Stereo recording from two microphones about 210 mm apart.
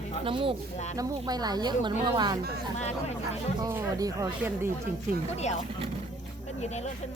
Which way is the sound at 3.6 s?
15° right (ahead or behind).